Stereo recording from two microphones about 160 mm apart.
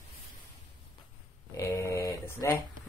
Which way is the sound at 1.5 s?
20° left (ahead or behind).